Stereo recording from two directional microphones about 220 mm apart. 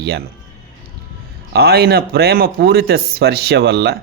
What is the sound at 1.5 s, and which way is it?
Speech, 45° right (ahead or behind).